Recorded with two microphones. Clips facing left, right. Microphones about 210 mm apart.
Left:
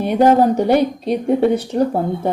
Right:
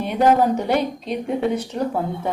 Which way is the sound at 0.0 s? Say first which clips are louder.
Left 4 dB; 40° left (ahead or behind).